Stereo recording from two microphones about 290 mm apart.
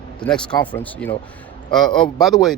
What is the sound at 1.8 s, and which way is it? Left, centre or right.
Speech, centre.